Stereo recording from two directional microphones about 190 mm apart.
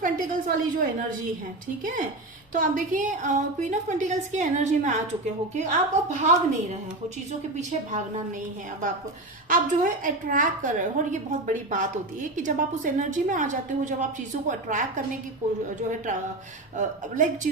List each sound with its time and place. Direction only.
0.0 s a woman's voice: 45° right (ahead or behind)
2.5 s a woman's voice: 45° right (ahead or behind)
9.5 s a woman's voice: 45° right (ahead or behind)
16.7 s a woman's voice: 40° right (ahead or behind)